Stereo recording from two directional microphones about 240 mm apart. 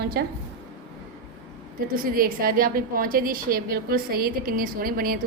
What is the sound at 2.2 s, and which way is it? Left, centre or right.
A woman's voice, right.